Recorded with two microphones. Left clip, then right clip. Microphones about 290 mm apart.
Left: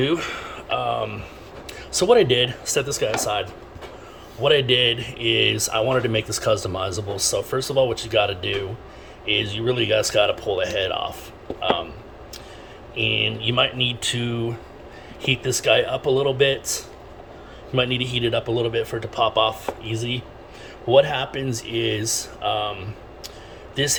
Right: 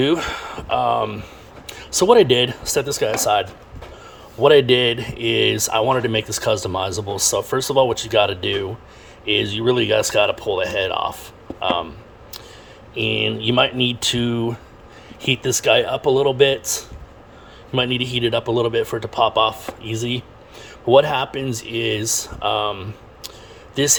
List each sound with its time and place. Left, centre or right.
0.0 s speech: centre
12.9 s speech: centre